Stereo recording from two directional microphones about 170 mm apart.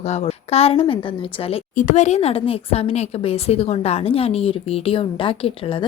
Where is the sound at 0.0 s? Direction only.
40° left (ahead or behind).